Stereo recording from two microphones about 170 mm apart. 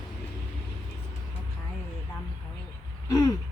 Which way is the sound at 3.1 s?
20° left (ahead or behind).